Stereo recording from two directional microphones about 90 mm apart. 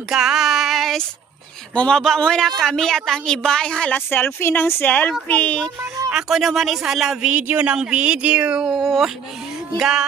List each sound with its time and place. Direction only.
0.1 s a sound: 5° right (ahead or behind)
1.8 s a woman's voice: 5° left (ahead or behind)
6.1 s speech: centre (ahead or behind)
7.2 s speech: 15° right (ahead or behind)
8.6 s speech: centre (ahead or behind)